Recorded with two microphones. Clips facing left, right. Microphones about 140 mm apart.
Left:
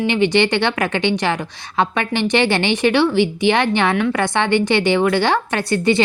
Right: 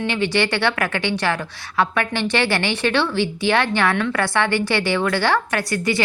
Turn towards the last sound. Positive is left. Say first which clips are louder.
# left 5 dB
turn(degrees=25)  # may be behind; listen again after turning